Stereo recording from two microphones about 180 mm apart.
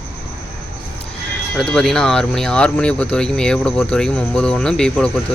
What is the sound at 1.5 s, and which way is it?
Speech, 5° left (ahead or behind).